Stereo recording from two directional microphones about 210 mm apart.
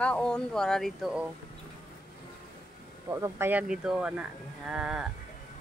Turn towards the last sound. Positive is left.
turn(degrees=-5)  # may be behind; listen again after turning